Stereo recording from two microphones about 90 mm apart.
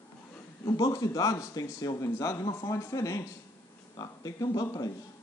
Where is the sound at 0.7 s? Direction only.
40° left (ahead or behind).